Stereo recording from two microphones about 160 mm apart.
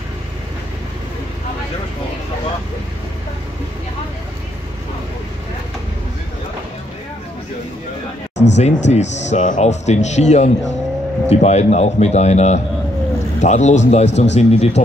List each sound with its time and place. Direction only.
8.5 s speech: 45° left (ahead or behind)